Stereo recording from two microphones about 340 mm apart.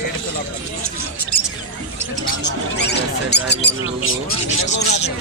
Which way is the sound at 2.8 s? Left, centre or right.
Left.